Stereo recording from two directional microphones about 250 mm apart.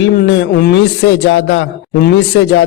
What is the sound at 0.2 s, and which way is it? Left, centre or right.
A man's voice, left.